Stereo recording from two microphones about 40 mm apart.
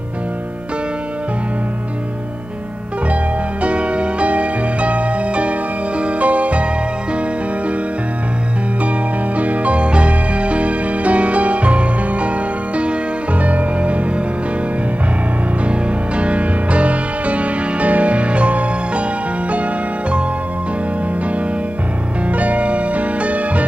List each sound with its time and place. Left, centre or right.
3.6 s music: right
9.4 s music: right
13.4 s music: right
15.6 s music: right
22.3 s music: right